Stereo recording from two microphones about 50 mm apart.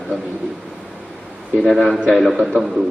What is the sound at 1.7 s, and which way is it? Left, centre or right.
A man's voice, centre.